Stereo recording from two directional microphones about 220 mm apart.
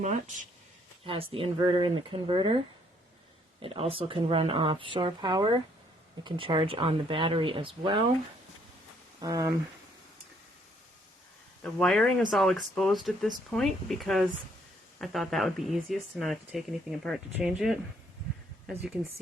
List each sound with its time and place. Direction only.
1.0 s speech: 25° right (ahead or behind)
3.6 s speech: 25° right (ahead or behind)
9.2 s speech: 15° right (ahead or behind)
11.6 s speech: 5° left (ahead or behind)